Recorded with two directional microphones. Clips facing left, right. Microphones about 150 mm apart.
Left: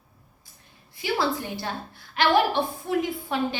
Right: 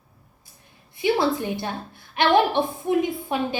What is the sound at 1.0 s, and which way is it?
A woman's voice, 20° right (ahead or behind).